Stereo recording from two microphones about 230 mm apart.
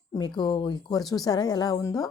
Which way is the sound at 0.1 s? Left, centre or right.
Centre.